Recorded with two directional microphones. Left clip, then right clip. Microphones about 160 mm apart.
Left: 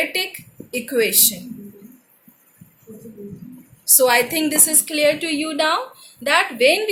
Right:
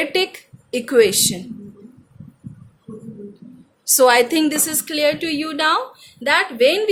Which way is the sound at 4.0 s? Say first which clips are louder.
Right 3 dB; 65° right (ahead or behind).